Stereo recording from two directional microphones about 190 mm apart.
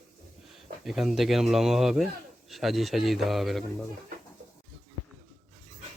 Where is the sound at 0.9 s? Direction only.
Centre (ahead or behind).